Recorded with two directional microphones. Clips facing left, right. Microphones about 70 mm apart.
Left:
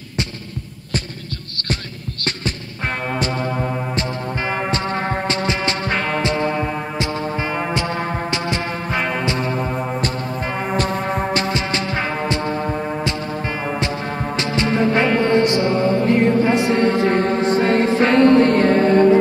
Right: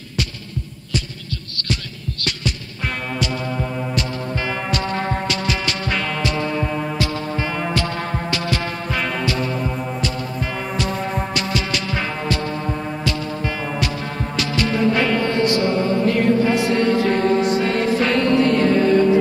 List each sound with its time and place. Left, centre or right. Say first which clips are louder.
4.6 s music: left 1 dB; left
10.7 s music: left 4 dB; left
11.3 s music: left 2 dB; left
14.3 s music: left 1 dB; left
16.1 s mantra: left 1 dB; left